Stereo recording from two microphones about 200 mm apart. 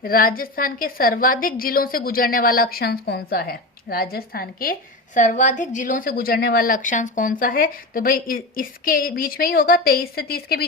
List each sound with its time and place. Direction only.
0.0 s a woman's voice: 45° left (ahead or behind)